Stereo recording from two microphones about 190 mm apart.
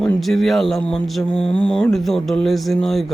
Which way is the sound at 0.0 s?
Centre (ahead or behind).